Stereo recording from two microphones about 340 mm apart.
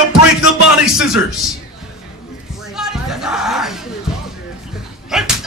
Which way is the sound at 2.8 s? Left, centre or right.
Centre.